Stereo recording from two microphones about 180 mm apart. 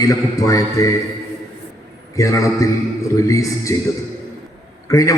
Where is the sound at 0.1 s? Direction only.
20° left (ahead or behind).